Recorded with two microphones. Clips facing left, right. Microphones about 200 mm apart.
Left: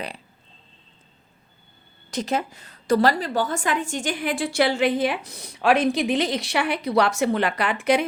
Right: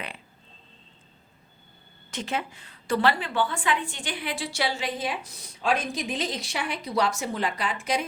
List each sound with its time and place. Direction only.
2.0 s a woman's voice: 40° left (ahead or behind); by 8.0 s 65° left (ahead or behind)